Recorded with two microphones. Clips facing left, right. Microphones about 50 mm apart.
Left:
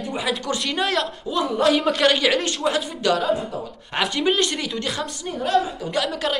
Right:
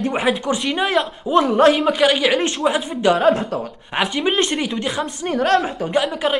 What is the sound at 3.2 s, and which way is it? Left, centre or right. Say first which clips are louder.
Speech: right 7 dB; right.